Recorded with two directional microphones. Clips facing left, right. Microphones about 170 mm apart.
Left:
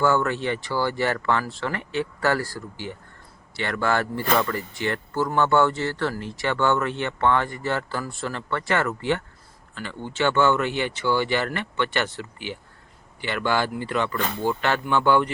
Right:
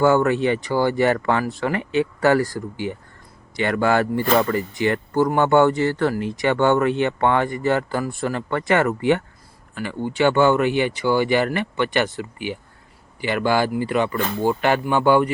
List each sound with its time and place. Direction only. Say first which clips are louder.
0.0 s speech: right 5 dB; 15° right (ahead or behind)